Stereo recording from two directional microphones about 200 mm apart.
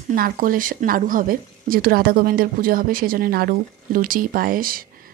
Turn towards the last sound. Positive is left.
turn(degrees=-45)  # may be behind; listen again after turning